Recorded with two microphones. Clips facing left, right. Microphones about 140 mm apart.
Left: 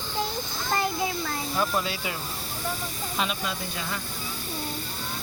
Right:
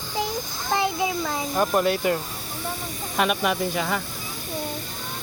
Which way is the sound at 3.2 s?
65° right (ahead or behind).